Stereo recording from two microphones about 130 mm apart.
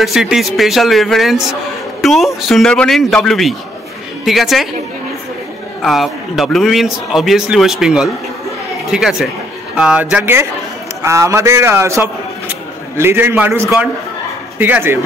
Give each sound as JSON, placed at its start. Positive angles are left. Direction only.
{"t": 0.0, "sound": "a man's voice", "side_deg": 0}
{"t": 5.8, "sound": "a man's voice", "side_deg": 0}